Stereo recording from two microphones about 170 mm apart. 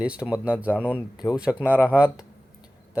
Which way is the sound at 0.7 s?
10° left (ahead or behind).